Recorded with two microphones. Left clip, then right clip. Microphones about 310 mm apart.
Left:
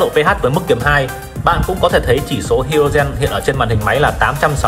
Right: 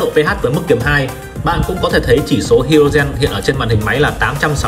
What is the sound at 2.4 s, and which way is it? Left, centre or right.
Speech, centre.